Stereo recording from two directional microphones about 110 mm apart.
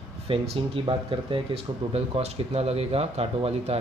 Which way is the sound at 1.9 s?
70° right (ahead or behind).